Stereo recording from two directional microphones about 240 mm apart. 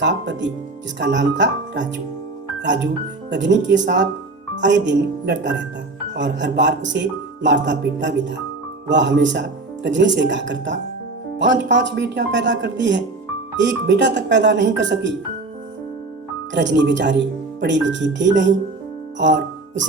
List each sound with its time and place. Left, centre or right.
0.0 s speech: right
16.6 s speech: right
19.2 s music: right